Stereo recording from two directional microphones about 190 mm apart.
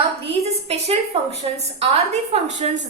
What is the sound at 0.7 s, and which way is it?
A woman's voice, 35° right (ahead or behind).